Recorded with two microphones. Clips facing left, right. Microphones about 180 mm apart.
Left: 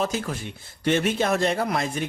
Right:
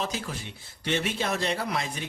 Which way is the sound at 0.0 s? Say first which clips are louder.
Left 6 dB; 50° left (ahead or behind).